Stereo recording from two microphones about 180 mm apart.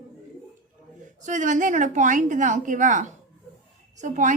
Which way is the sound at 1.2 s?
45° right (ahead or behind).